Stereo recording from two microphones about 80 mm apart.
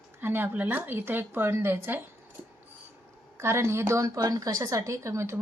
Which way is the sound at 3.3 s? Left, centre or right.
Right.